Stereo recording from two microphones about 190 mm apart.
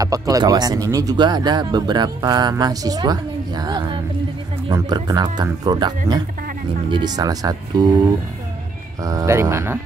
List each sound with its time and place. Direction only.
0.0 s speech: 20° right (ahead or behind)
9.0 s speech: 15° right (ahead or behind)